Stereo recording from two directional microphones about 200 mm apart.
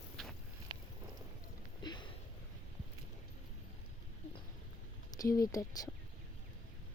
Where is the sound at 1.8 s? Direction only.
20° left (ahead or behind).